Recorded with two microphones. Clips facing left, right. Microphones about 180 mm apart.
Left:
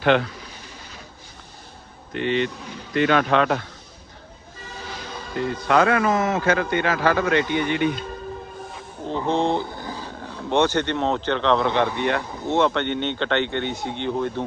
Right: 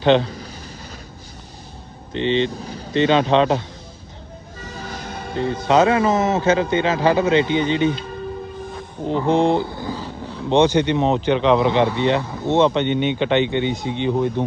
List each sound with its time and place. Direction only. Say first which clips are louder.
0.0 s a man's voice: right 3 dB; 25° right (ahead or behind)
0.3 s a sound: right 5 dB; 40° right (ahead or behind)
2.1 s a man's voice: right 3 dB; 25° right (ahead or behind)
4.6 s music: right 3 dB; 45° right (ahead or behind)
5.3 s a man's voice: right 3 dB; 25° right (ahead or behind)
9.0 s speech: right 5 dB; 15° right (ahead or behind)